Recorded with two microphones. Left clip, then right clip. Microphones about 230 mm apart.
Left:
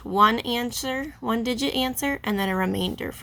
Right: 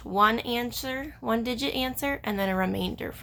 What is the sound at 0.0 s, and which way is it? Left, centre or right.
Speech, left.